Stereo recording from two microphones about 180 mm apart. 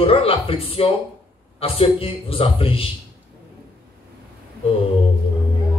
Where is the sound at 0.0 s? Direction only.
30° left (ahead or behind).